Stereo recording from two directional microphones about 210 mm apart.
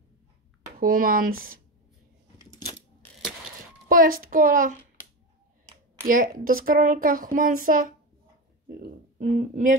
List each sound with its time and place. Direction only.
0.7 s speech: 45° right (ahead or behind)
2.6 s coin: 15° left (ahead or behind)
3.9 s a woman's voice: 40° right (ahead or behind)
6.0 s a woman's voice: 40° right (ahead or behind)